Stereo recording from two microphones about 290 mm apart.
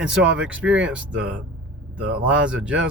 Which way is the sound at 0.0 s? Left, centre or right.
Centre.